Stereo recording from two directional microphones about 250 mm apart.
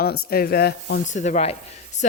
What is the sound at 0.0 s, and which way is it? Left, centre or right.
Speech, left.